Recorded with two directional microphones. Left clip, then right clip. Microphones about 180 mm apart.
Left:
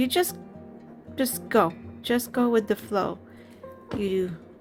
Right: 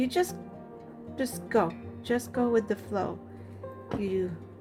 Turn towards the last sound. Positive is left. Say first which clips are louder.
# left 4 dB
turn(degrees=40)  # may be behind; listen again after turning